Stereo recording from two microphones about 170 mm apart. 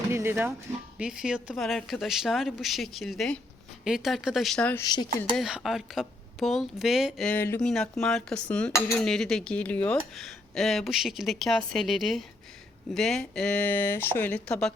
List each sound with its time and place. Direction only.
0.1 s music: 15° right (ahead or behind)
0.9 s cutlery: 5° right (ahead or behind)
4.8 s speech: 25° left (ahead or behind)
5.4 s cutlery: 5° right (ahead or behind)
12.9 s speech: centre (ahead or behind)